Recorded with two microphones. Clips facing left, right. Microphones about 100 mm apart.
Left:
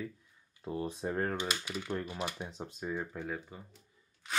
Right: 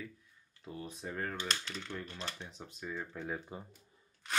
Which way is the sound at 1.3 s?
15° left (ahead or behind).